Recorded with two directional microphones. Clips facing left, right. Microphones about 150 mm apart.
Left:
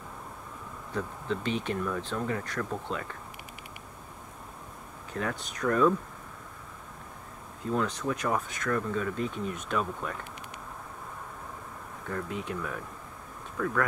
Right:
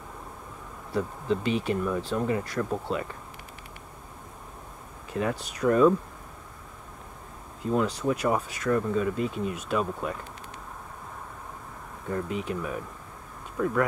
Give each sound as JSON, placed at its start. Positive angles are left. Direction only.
{"t": 0.9, "sound": "speech", "side_deg": -10}
{"t": 5.1, "sound": "speech", "side_deg": -10}
{"t": 7.7, "sound": "speech", "side_deg": -10}
{"t": 12.1, "sound": "speech", "side_deg": -15}